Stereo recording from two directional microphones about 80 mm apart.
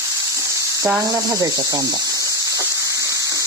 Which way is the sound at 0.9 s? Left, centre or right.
Right.